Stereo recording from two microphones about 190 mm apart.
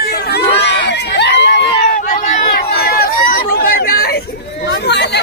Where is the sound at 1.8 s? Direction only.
45° left (ahead or behind); by 5.1 s 65° left (ahead or behind).